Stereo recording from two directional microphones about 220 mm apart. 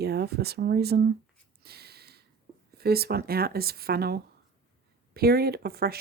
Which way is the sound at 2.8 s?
45° right (ahead or behind).